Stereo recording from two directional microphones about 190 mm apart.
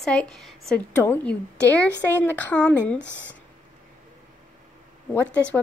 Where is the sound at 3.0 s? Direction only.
70° left (ahead or behind).